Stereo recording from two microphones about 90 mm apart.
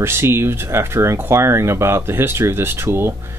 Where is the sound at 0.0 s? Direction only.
25° right (ahead or behind).